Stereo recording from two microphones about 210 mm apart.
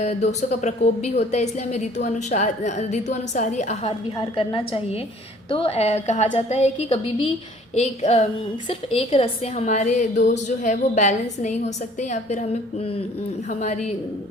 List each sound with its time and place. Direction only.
0.0 s a woman's voice: 30° left (ahead or behind)
13.5 s a woman's voice: 35° left (ahead or behind)